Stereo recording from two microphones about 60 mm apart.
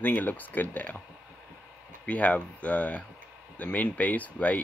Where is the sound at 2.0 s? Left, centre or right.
Left.